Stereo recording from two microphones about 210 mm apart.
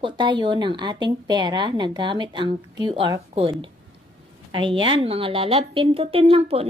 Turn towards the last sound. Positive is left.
turn(degrees=-30)  # may be behind; listen again after turning